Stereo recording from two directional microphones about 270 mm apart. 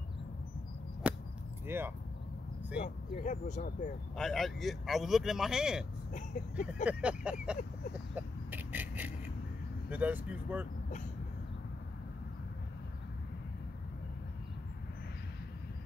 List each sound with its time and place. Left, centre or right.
1.0 s arrow: centre
1.7 s speech: centre
2.8 s speech: left
4.2 s speech: centre
6.1 s speech: left
6.7 s vehicle: centre
9.8 s speech: centre